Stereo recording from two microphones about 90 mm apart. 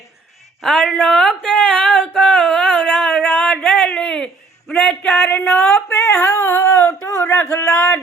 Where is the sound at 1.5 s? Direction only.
15° left (ahead or behind).